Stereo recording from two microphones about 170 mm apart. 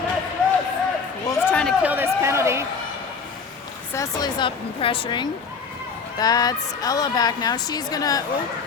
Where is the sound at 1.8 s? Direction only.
10° right (ahead or behind).